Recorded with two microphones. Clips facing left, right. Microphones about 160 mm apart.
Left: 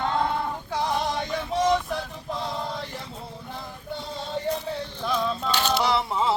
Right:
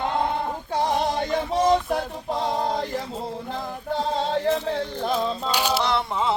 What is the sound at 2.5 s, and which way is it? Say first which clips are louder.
Male singing: right 7 dB; 50° right (ahead or behind).